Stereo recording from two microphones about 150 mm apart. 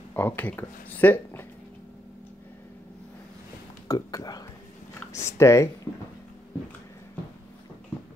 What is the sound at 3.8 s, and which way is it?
Speech, 25° left (ahead or behind).